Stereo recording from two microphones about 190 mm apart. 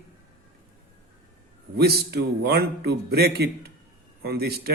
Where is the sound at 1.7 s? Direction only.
55° right (ahead or behind).